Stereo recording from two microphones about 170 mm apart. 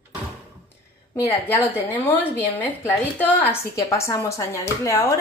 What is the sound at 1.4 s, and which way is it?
Speech, 15° left (ahead or behind).